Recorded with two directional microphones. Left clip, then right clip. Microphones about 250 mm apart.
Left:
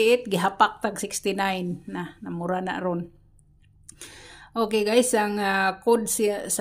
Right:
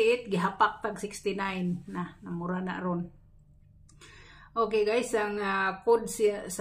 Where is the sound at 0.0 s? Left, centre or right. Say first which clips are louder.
Left 5 dB; left.